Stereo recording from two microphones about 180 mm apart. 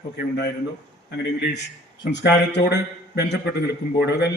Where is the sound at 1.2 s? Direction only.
70° left (ahead or behind).